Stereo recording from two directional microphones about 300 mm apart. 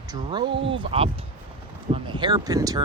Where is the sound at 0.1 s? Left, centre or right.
Centre.